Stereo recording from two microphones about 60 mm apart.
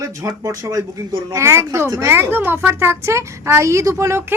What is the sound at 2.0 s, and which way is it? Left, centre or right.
A woman's voice, right.